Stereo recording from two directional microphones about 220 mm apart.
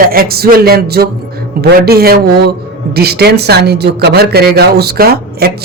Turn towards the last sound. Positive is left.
turn(degrees=-45)  # may be behind; listen again after turning